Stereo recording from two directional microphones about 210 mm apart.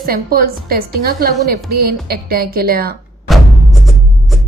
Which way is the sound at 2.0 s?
45° right (ahead or behind).